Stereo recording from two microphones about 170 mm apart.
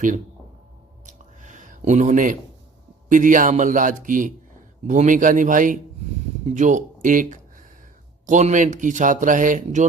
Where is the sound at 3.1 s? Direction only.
50° right (ahead or behind).